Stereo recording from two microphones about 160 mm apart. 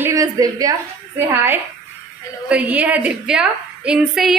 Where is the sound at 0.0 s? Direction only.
20° right (ahead or behind).